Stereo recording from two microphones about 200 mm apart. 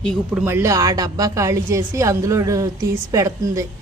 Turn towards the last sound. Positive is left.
turn(degrees=-15)  # may be behind; listen again after turning